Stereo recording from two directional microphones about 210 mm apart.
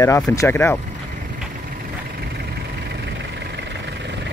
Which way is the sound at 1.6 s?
50° right (ahead or behind).